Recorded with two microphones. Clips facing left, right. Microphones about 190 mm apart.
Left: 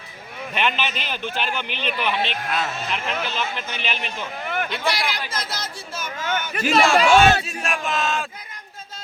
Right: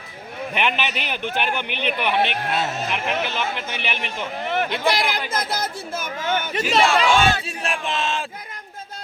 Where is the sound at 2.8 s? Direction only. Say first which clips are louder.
Right 2 dB; 15° right (ahead or behind).